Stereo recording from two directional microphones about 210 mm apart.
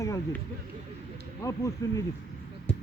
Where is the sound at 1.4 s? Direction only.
15° left (ahead or behind).